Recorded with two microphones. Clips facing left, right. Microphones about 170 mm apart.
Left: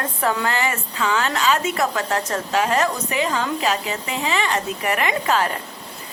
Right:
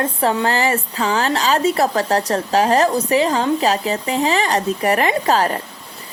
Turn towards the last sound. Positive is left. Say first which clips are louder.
# right 4 dB
turn(degrees=-35)  # may be behind; listen again after turning